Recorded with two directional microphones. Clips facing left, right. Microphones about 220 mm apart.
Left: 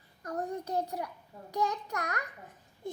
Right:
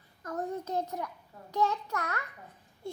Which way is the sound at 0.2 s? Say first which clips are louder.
Even; 35° left (ahead or behind).